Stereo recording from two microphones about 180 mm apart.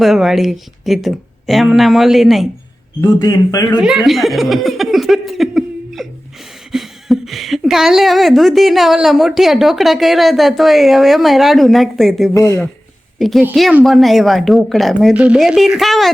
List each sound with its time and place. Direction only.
0.0 s a woman's voice: centre (ahead or behind)
3.2 s a man's voice: 20° left (ahead or behind)
3.8 s a woman's voice: centre (ahead or behind)
12.3 s speech: 15° left (ahead or behind)
13.1 s a woman's voice: centre (ahead or behind)